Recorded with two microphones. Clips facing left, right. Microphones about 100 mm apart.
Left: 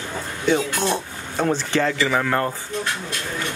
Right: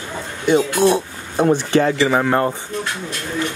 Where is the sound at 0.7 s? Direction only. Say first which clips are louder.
Right 8 dB; 10° right (ahead or behind); by 2.5 s 25° right (ahead or behind).